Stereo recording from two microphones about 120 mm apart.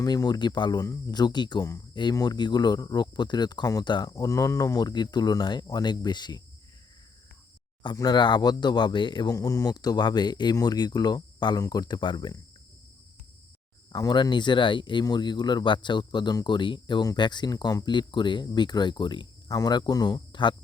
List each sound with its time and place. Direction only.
0.0 s speech: 30° left (ahead or behind)
1.6 s speech: 25° left (ahead or behind)
2.0 s speech: 35° left (ahead or behind)
7.9 s speech: 35° left (ahead or behind)
13.9 s speech: 40° left (ahead or behind)